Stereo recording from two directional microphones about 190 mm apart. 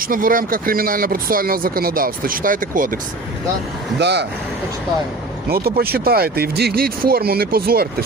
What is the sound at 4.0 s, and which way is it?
Speech, 65° right (ahead or behind).